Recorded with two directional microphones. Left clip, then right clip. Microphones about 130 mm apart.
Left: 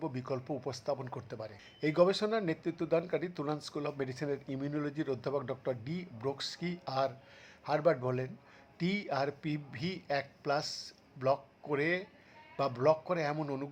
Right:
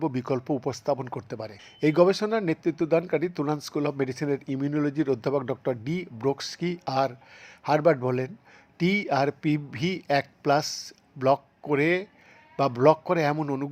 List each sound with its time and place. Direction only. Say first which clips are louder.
0.0 s a man's voice: right 10 dB; 45° right (ahead or behind)